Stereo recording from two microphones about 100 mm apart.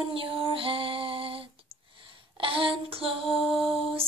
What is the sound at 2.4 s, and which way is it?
Child singing, 60° right (ahead or behind).